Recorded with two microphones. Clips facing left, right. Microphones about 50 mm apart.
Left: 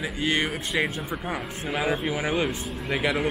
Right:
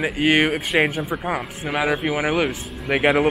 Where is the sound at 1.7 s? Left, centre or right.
Right.